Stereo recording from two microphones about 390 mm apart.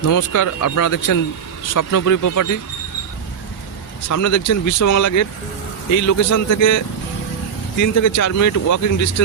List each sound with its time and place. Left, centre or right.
0.0 s speech: left
4.1 s speech: left